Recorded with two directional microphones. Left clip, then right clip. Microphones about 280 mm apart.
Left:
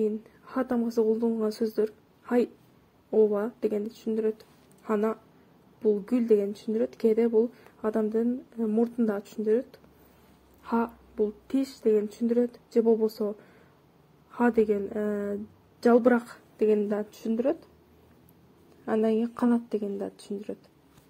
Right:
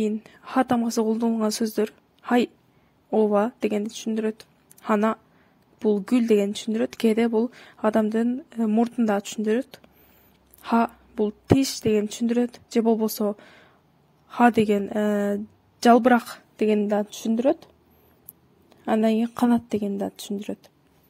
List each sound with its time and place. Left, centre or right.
0.0 s a woman's voice: right
18.9 s a woman's voice: right